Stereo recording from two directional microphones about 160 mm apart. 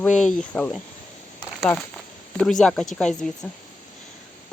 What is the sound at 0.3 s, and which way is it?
Speech, 5° left (ahead or behind).